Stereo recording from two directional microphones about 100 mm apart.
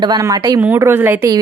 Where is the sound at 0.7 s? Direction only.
20° right (ahead or behind).